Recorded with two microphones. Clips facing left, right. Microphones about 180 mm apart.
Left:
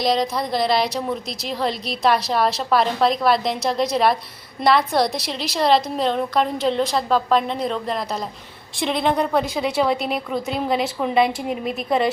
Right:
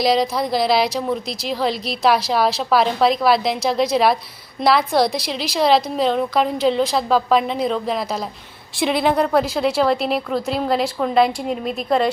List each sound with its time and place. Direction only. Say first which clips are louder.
0.0 s a woman's voice: right 3 dB; 5° right (ahead or behind)